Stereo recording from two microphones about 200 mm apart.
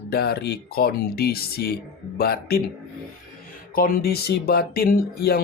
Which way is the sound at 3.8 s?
45° left (ahead or behind).